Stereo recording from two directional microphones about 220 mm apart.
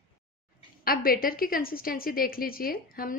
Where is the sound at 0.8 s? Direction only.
40° left (ahead or behind).